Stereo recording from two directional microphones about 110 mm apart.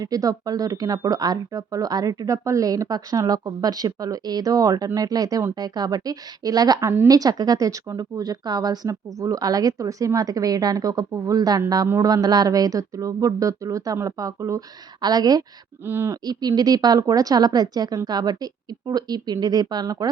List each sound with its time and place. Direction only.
0.0 s speech: 35° right (ahead or behind)
7.1 s speech: 35° right (ahead or behind)
15.9 s speech: 20° right (ahead or behind)
16.2 s speech: 40° right (ahead or behind)